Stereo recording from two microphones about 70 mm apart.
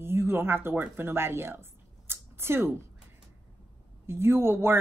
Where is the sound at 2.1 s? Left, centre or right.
Right.